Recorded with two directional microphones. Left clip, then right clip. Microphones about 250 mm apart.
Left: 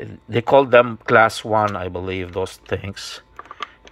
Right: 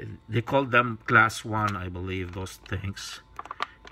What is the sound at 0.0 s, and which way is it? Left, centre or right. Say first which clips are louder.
Speech: left 10 dB; centre.